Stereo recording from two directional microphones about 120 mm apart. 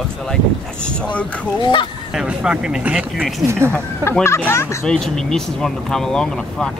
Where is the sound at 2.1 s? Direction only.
5° right (ahead or behind).